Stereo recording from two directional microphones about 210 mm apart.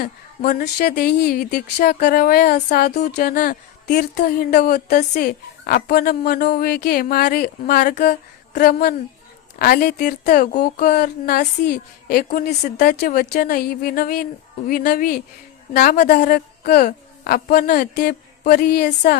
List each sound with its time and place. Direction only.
0.0 s speech: 40° left (ahead or behind)